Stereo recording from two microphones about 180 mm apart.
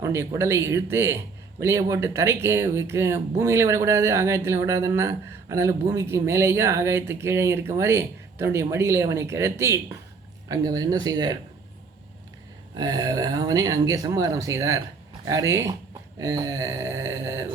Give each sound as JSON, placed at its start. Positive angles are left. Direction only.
{"t": 0.0, "sound": "a man's voice", "side_deg": -15}
{"t": 12.7, "sound": "a man's voice", "side_deg": -20}